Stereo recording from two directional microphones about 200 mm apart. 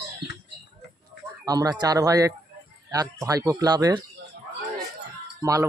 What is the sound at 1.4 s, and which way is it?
Speech, 20° right (ahead or behind).